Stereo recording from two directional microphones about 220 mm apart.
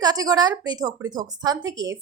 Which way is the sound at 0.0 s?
15° right (ahead or behind).